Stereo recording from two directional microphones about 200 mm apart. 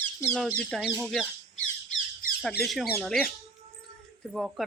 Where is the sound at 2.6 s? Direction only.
Centre (ahead or behind).